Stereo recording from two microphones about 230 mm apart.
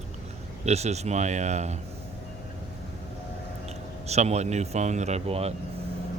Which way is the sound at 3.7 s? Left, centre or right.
Right.